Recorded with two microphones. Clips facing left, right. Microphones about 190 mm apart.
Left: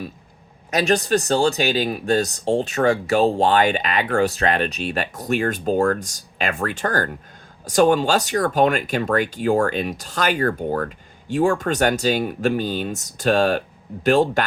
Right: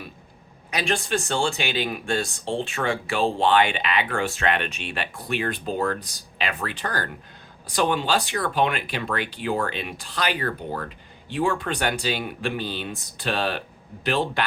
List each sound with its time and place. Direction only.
0.7 s speech: 45° left (ahead or behind)